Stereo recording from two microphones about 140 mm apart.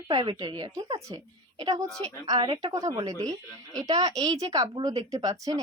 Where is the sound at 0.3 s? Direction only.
35° right (ahead or behind).